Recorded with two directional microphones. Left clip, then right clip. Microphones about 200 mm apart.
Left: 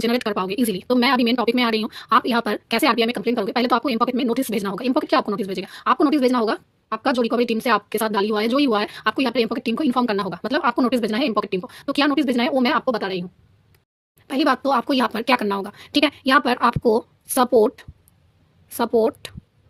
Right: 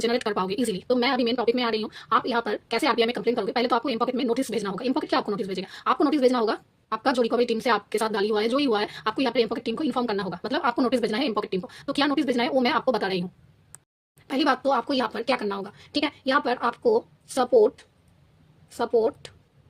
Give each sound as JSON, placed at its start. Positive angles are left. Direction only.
{"t": 0.0, "sound": "speech", "side_deg": 25}
{"t": 14.3, "sound": "speech", "side_deg": 20}